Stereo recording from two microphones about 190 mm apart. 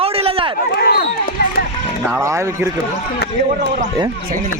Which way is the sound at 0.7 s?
50° left (ahead or behind).